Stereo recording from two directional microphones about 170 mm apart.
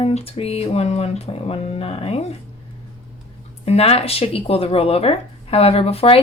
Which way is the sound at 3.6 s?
35° left (ahead or behind).